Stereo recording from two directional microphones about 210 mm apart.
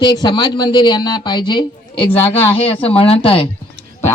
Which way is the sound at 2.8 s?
25° left (ahead or behind).